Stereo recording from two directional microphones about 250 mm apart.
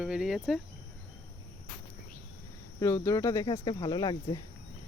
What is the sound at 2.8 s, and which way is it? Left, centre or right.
Speech, centre.